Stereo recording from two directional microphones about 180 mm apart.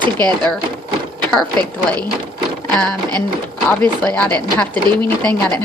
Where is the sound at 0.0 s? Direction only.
20° right (ahead or behind).